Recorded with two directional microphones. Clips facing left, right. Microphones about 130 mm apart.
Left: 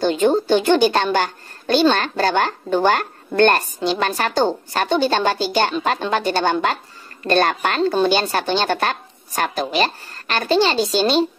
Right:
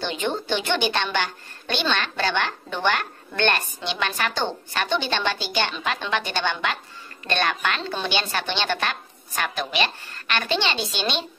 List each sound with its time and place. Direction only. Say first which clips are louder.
0.0 s a woman's voice: left 10 dB; 40° left (ahead or behind)